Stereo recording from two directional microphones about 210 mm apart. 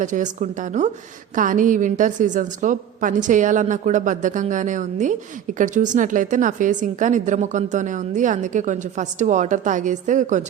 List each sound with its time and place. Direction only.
0.0 s a woman's voice: 35° right (ahead or behind)